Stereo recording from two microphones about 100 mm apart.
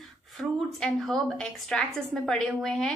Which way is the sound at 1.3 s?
5° left (ahead or behind).